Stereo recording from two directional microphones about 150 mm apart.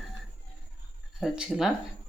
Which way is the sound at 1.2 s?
5° right (ahead or behind).